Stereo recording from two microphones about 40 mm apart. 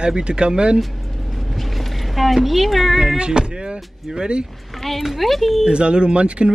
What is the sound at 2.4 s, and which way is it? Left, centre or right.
Speech, centre.